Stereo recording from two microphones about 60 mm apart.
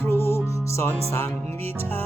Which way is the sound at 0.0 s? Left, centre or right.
Left.